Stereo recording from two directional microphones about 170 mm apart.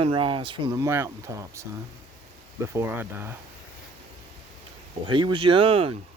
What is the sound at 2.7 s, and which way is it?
Speech, 15° right (ahead or behind).